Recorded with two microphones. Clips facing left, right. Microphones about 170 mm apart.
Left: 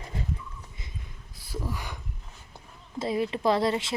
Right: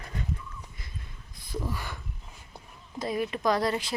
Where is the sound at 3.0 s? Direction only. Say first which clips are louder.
Left 2 dB; 25° left (ahead or behind).